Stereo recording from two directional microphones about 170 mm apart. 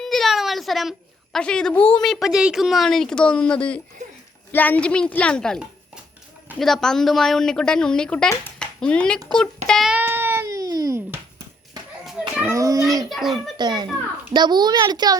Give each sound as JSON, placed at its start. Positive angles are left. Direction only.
{"t": 0.0, "sound": "a sound", "side_deg": 0}
{"t": 1.9, "sound": "a woman's voice", "side_deg": 5}
{"t": 9.6, "sound": "cat", "side_deg": 0}
{"t": 12.4, "sound": "a sound", "side_deg": -20}
{"t": 13.1, "sound": "a child's voice", "side_deg": 0}
{"t": 13.6, "sound": "a child's voice", "side_deg": -25}